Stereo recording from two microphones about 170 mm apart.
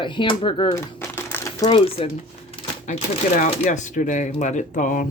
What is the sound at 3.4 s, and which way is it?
Speech, 45° left (ahead or behind).